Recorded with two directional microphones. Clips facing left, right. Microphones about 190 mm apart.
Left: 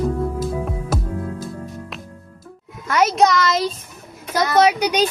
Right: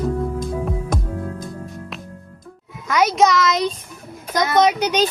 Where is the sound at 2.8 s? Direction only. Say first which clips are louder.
Even; 5° left (ahead or behind).